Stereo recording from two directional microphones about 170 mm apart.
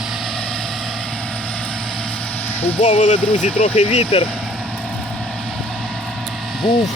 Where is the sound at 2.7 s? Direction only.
30° left (ahead or behind).